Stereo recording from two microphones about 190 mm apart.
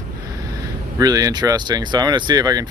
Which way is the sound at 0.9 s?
20° right (ahead or behind).